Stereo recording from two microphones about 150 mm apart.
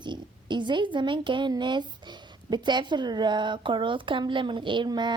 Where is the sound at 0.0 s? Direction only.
30° right (ahead or behind).